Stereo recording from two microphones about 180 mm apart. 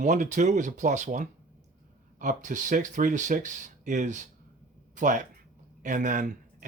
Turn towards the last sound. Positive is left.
turn(degrees=-45)  # may be behind; listen again after turning